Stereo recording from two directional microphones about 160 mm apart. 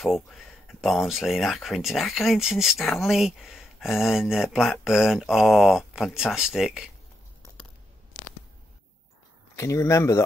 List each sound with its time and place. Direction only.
0.0 s speech: centre (ahead or behind)
9.6 s speech: 20° left (ahead or behind)